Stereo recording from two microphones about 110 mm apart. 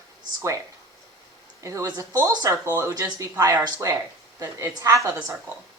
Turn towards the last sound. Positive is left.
turn(degrees=-30)  # may be behind; listen again after turning